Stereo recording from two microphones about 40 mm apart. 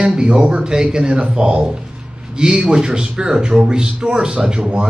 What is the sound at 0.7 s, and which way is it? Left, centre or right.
A man's voice, centre.